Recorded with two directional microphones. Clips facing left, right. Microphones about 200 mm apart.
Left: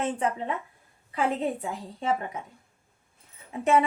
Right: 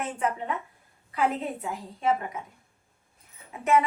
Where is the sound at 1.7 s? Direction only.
30° left (ahead or behind).